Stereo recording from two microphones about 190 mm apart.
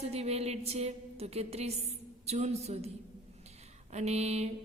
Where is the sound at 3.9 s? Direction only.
35° right (ahead or behind).